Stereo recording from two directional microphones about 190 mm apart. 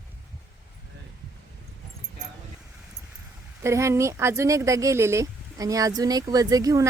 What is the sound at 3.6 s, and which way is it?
Speech, 15° right (ahead or behind).